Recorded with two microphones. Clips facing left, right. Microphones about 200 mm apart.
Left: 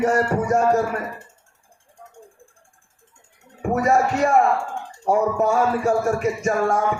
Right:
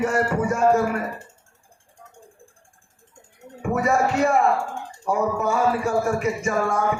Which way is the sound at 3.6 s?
45° left (ahead or behind).